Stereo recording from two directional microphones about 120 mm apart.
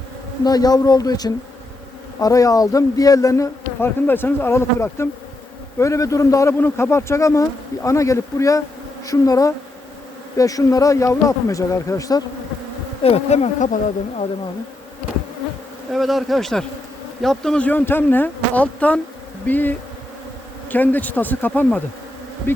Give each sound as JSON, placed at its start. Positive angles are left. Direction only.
{"t": 0.4, "sound": "a man's voice", "side_deg": 35}
{"t": 13.0, "sound": "bee", "side_deg": 55}
{"t": 15.9, "sound": "speech", "side_deg": 0}
{"t": 22.5, "sound": "bee", "side_deg": 20}